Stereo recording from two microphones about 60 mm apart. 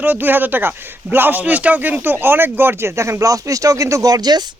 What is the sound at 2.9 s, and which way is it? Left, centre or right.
Speech, right.